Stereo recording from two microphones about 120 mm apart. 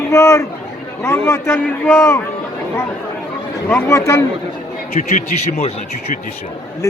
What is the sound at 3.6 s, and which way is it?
Speech, 25° left (ahead or behind).